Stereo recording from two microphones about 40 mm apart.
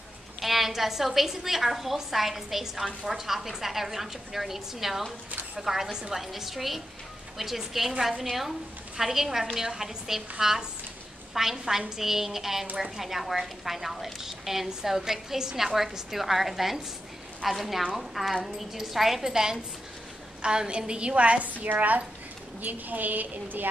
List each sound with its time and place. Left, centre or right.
0.4 s a woman's voice: centre; by 21.5 s right
21.6 s a woman's voice: right